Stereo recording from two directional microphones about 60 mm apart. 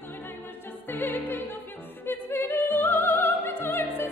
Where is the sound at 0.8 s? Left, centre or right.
Left.